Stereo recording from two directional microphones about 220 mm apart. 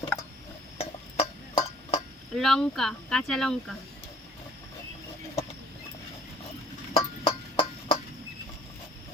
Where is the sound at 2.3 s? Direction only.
Centre (ahead or behind).